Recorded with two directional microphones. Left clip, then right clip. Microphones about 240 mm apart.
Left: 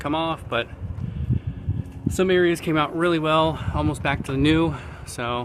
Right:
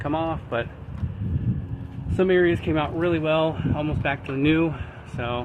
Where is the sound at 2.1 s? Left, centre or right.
Centre.